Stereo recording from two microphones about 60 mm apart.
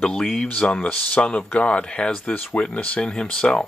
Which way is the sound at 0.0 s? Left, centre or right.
Centre.